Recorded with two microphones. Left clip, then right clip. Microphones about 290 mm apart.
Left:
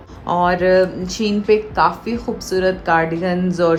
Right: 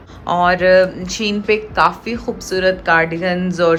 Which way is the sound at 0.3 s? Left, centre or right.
Centre.